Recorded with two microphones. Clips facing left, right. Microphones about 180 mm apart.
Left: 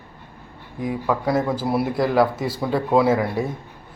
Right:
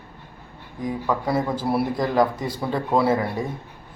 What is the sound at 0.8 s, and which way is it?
Speech, 5° left (ahead or behind).